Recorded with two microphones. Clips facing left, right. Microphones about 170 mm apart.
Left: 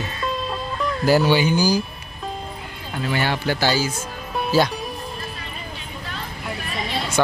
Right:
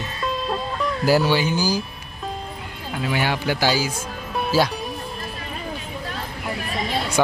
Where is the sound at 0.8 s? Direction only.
5° right (ahead or behind).